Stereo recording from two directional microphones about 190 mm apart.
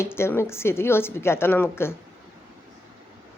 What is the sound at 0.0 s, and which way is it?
A woman's voice, 15° left (ahead or behind).